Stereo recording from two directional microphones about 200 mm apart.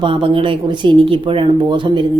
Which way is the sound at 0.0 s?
25° right (ahead or behind).